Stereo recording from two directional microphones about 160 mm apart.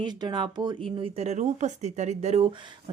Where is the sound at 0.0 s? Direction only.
30° right (ahead or behind).